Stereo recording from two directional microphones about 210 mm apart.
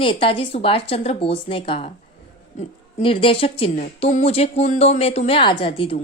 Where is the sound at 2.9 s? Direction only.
25° left (ahead or behind).